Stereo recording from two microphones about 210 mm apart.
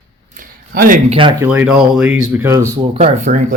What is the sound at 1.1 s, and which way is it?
Speech, 25° right (ahead or behind).